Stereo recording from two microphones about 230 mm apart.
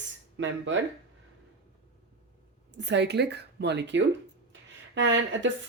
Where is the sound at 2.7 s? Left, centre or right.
Right.